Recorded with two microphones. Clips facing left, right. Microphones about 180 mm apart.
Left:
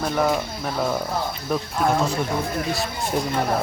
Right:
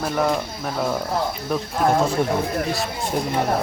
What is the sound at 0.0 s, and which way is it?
Speech, centre (ahead or behind).